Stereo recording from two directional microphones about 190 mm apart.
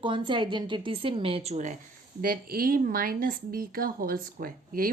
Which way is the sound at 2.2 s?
50° right (ahead or behind).